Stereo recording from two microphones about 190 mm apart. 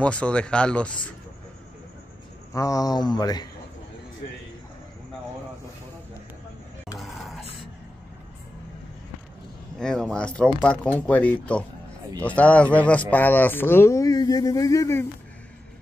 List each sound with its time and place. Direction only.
0.0 s speech: 5° left (ahead or behind)
2.5 s speech: 20° left (ahead or behind)
7.0 s a sound: centre (ahead or behind)
9.8 s speech: 5° left (ahead or behind)